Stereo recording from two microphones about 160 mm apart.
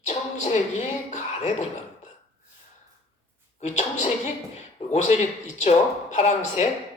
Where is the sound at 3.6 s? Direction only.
45° left (ahead or behind).